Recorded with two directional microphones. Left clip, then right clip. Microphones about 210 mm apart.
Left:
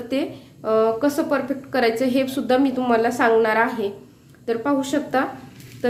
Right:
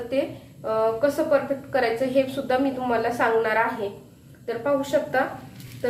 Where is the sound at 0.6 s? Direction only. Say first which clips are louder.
Left 3 dB; 60° left (ahead or behind).